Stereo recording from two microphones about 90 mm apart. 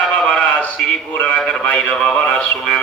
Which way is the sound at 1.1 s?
15° left (ahead or behind).